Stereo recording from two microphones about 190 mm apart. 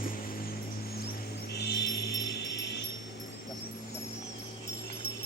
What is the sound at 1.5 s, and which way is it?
Music, 60° left (ahead or behind).